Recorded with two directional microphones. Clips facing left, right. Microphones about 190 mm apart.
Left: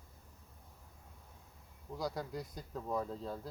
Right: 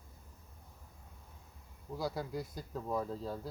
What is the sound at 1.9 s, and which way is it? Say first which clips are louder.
A man's voice: right 2 dB; 5° right (ahead or behind).